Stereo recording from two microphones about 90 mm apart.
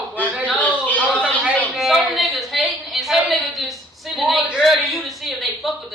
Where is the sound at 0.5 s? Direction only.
20° left (ahead or behind).